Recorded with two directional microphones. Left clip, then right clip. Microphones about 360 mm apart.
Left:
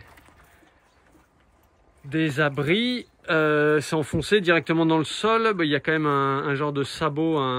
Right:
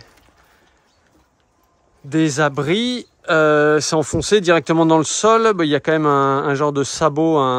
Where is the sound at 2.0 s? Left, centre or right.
Centre.